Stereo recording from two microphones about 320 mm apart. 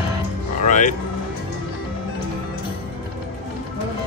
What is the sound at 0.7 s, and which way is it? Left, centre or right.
Speech, left.